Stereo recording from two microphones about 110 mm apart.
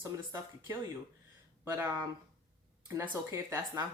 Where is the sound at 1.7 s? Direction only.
30° right (ahead or behind).